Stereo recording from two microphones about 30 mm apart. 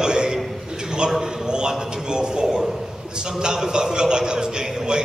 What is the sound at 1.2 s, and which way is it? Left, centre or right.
A man's voice, right.